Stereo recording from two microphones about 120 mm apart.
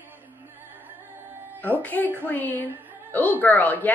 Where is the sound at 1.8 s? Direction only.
15° left (ahead or behind).